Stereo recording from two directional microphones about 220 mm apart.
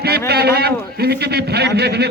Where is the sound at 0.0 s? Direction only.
45° right (ahead or behind).